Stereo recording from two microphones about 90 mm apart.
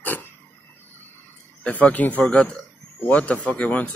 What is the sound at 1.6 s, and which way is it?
Speech, 15° left (ahead or behind).